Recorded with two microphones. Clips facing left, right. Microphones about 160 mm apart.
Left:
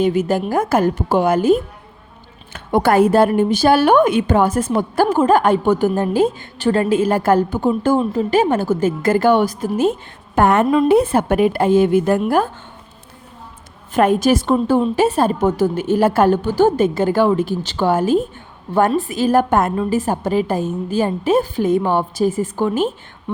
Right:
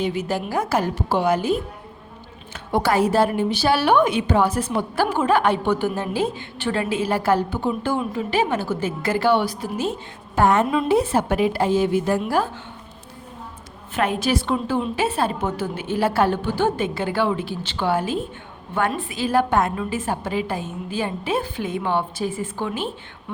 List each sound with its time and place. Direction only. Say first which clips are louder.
0.0 s a woman's voice: left 7 dB; 50° left (ahead or behind)
13.9 s a woman's voice: left 7 dB; 45° left (ahead or behind)